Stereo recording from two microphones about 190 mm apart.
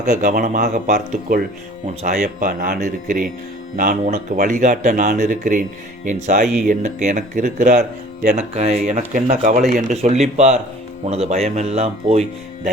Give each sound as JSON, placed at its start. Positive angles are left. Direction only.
{"t": 0.0, "sound": "speech", "side_deg": -45}
{"t": 2.0, "sound": "speech", "side_deg": -40}
{"t": 8.4, "sound": "speech", "side_deg": -35}